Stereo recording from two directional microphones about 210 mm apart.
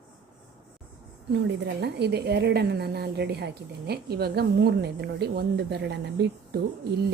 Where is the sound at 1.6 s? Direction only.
50° right (ahead or behind).